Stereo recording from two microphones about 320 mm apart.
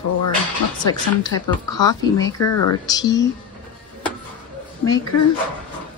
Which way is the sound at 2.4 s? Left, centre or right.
Left.